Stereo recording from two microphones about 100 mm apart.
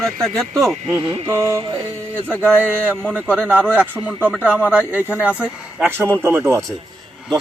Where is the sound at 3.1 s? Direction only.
15° right (ahead or behind).